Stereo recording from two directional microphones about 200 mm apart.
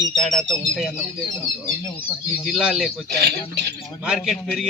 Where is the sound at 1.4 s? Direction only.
25° left (ahead or behind).